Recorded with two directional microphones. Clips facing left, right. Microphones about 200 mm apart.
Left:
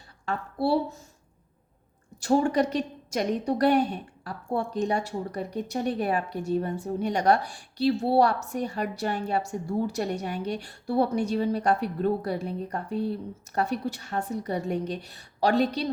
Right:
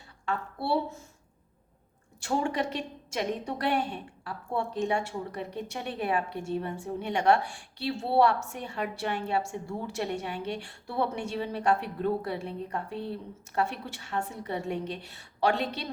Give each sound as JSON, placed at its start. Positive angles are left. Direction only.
{"t": 0.3, "sound": "a woman's voice", "side_deg": 35}
{"t": 2.2, "sound": "a woman's voice", "side_deg": 40}